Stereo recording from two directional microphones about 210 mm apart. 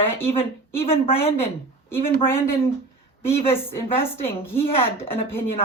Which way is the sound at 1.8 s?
10° left (ahead or behind).